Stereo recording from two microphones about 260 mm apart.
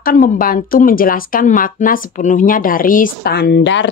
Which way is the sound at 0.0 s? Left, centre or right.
Left.